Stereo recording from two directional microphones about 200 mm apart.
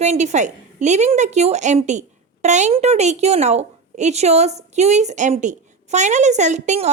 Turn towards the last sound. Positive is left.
turn(degrees=-35)  # may be behind; listen again after turning